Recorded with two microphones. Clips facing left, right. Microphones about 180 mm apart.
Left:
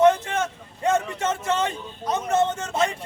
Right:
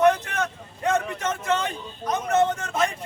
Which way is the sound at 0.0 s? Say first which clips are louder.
Left 2 dB; 25° left (ahead or behind).